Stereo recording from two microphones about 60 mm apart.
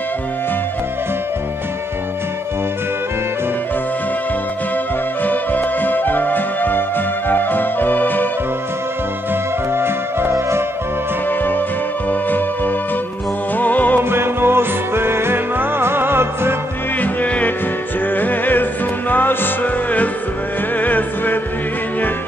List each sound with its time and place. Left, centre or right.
5.2 s music: left
9.8 s music: right
11.2 s music: left
14.0 s music: right
17.0 s music: left